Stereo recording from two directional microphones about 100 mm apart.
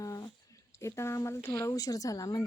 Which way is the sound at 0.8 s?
30° left (ahead or behind).